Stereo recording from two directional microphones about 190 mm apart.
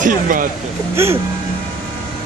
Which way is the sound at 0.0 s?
45° right (ahead or behind).